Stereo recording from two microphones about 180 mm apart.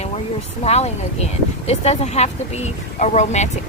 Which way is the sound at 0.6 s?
35° left (ahead or behind).